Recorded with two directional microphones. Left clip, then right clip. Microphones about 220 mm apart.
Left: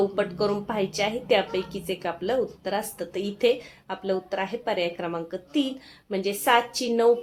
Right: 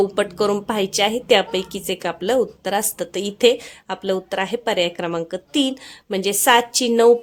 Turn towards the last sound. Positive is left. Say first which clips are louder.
# right 7 dB
turn(degrees=-45)  # may be behind; listen again after turning